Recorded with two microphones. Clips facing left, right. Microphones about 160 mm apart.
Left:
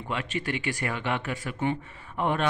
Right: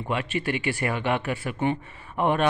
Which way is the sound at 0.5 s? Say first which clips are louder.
Right 5 dB; 10° right (ahead or behind).